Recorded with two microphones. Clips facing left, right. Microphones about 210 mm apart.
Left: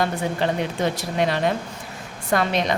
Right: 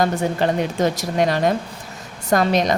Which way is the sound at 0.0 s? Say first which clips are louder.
Right 4 dB; 45° right (ahead or behind).